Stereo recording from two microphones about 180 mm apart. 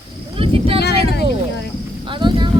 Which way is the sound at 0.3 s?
30° right (ahead or behind).